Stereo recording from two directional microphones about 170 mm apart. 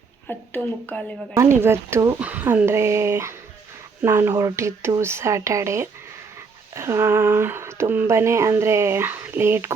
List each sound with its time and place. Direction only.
0.3 s speech: 10° left (ahead or behind)
1.3 s speech: 15° right (ahead or behind)